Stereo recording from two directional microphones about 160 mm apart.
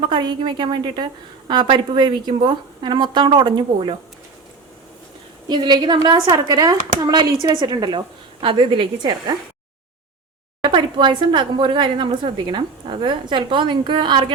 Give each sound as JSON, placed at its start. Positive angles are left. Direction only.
{"t": 0.0, "sound": "speech", "side_deg": -30}
{"t": 5.5, "sound": "speech", "side_deg": -25}
{"t": 10.6, "sound": "speech", "side_deg": -30}